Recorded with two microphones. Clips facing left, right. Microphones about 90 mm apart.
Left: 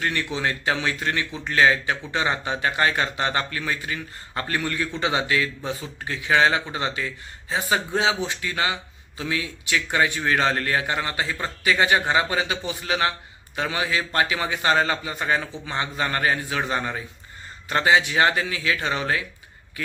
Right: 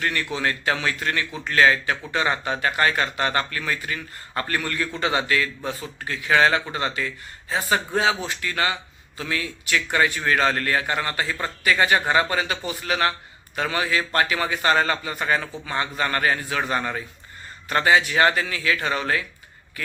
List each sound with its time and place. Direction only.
0.0 s a man's voice: 25° left (ahead or behind)